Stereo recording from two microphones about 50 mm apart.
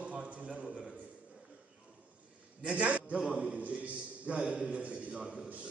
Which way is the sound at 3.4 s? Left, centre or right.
Right.